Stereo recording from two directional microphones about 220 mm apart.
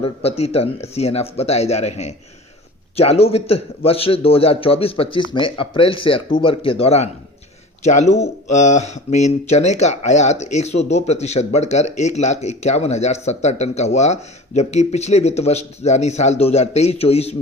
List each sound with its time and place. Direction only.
0.0 s a man's voice: 25° left (ahead or behind)